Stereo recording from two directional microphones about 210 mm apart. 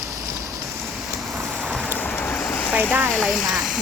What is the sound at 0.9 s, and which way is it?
Vehicle, centre (ahead or behind).